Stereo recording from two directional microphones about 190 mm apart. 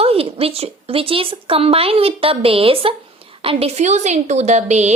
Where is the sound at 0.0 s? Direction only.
30° right (ahead or behind).